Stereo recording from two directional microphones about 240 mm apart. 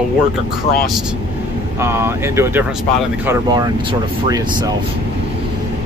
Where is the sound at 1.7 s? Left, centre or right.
Centre.